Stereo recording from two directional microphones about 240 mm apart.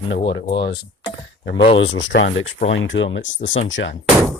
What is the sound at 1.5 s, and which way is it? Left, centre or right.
Speech, left.